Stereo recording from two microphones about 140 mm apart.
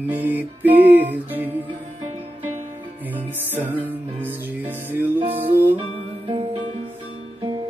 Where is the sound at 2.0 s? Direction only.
60° right (ahead or behind).